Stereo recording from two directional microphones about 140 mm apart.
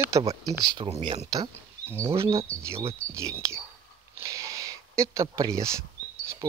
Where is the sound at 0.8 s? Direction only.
45° right (ahead or behind).